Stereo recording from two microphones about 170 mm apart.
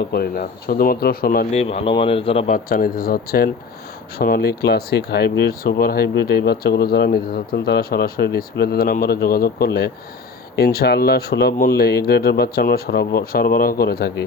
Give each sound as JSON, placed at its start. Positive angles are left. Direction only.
{"t": 0.0, "sound": "speech", "side_deg": 65}
{"t": 1.5, "sound": "speech", "side_deg": 35}
{"t": 2.5, "sound": "speech", "side_deg": 60}